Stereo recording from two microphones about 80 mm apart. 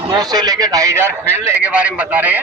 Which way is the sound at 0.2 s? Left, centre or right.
Right.